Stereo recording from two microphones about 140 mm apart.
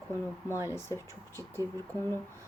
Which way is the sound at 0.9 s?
25° right (ahead or behind).